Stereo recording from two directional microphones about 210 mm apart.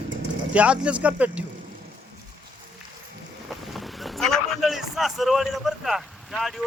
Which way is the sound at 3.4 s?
Centre (ahead or behind).